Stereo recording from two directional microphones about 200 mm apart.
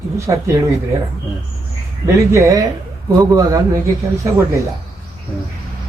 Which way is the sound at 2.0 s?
15° right (ahead or behind).